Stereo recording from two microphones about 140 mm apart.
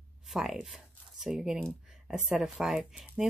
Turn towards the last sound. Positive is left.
turn(degrees=-5)  # may be behind; listen again after turning